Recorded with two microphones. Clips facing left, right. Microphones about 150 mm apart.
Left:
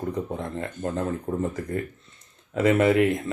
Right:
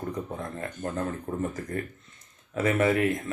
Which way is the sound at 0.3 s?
25° left (ahead or behind).